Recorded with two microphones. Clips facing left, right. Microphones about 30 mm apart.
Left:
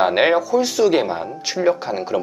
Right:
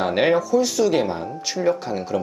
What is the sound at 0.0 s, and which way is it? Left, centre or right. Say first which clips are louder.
Speech: left 3 dB; left.